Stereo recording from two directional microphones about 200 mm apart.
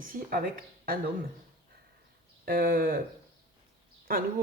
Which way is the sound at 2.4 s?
45° right (ahead or behind).